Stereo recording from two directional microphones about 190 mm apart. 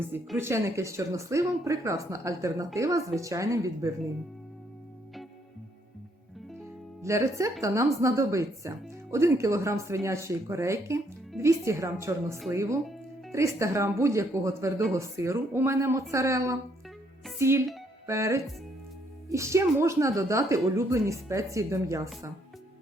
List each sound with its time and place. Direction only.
0.3 s speech: 15° right (ahead or behind)
7.0 s speech: 15° right (ahead or behind)
18.0 s music: 15° right (ahead or behind)
19.3 s speech: 15° right (ahead or behind)